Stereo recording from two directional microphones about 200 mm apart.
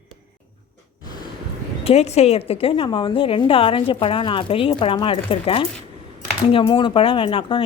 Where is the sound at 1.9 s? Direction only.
30° left (ahead or behind).